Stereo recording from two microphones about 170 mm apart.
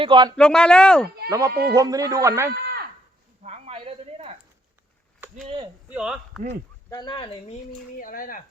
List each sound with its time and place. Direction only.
0.0 s speech: 25° right (ahead or behind)
0.3 s speech: 5° left (ahead or behind)
1.3 s speech: 20° right (ahead or behind)
3.4 s a sound: 35° right (ahead or behind)
5.3 s speech: 45° right (ahead or behind)
5.9 s speech: 5° right (ahead or behind)
6.9 s speech: 25° left (ahead or behind)
7.9 s speech: 55° left (ahead or behind)